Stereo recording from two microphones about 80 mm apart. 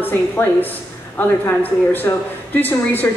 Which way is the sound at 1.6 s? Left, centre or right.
Left.